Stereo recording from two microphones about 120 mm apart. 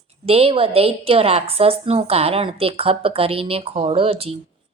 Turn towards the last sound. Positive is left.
turn(degrees=-55)  # may be behind; listen again after turning